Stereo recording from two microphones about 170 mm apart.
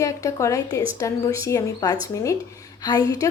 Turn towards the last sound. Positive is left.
turn(degrees=20)  # may be behind; listen again after turning